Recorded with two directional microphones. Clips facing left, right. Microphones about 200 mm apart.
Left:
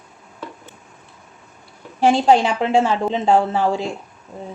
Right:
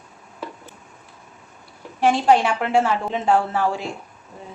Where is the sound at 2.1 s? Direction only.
25° left (ahead or behind).